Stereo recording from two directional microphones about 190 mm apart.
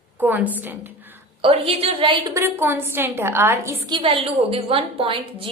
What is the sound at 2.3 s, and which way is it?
A woman's voice, 15° right (ahead or behind).